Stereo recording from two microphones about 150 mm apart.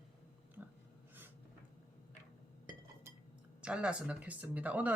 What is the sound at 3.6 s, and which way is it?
Speech, 5° right (ahead or behind).